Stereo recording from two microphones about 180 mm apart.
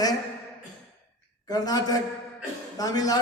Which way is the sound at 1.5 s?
20° left (ahead or behind).